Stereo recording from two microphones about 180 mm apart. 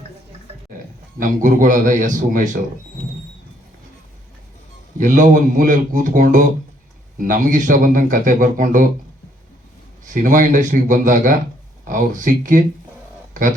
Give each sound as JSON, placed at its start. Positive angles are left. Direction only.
{"t": 1.2, "sound": "a man's voice", "side_deg": -50}
{"t": 4.9, "sound": "a man's voice", "side_deg": -45}
{"t": 10.1, "sound": "a man's voice", "side_deg": -45}